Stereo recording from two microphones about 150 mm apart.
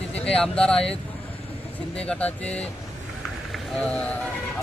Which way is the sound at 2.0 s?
10° left (ahead or behind).